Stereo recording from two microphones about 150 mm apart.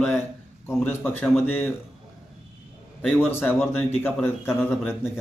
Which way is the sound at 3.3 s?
15° left (ahead or behind).